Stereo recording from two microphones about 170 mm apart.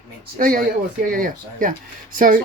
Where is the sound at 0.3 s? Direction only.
55° right (ahead or behind).